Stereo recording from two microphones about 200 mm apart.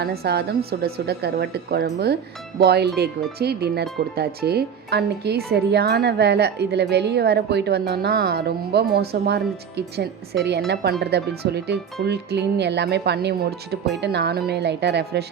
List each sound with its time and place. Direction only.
0.0 s speech: 50° right (ahead or behind)